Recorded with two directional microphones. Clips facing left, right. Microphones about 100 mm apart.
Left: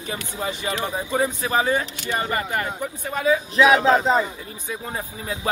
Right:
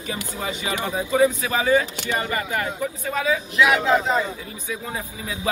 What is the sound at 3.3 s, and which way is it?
Speech, 35° left (ahead or behind).